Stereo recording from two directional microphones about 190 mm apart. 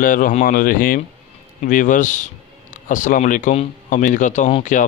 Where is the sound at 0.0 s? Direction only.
45° left (ahead or behind).